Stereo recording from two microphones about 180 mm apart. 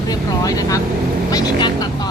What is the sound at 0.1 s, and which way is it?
Speech, 20° left (ahead or behind).